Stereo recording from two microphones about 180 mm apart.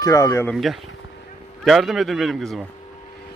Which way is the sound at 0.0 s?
15° left (ahead or behind).